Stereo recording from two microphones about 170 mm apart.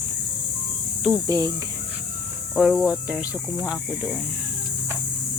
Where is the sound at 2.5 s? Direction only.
5° right (ahead or behind).